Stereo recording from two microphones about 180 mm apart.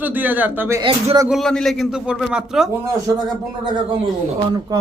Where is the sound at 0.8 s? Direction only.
25° right (ahead or behind).